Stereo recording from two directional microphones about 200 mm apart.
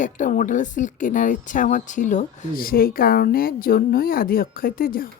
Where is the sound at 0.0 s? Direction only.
40° left (ahead or behind).